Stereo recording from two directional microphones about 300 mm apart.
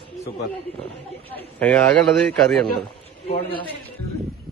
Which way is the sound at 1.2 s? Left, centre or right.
Centre.